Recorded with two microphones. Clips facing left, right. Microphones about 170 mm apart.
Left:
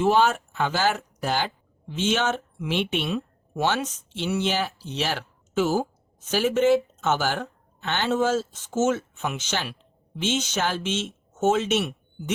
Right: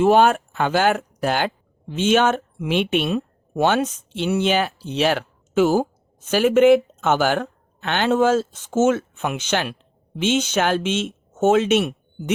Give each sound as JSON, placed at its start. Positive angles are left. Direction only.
{"t": 0.0, "sound": "speech", "side_deg": -55}